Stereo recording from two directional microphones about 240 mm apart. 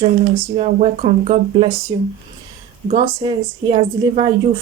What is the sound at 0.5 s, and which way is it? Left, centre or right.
Speech, right.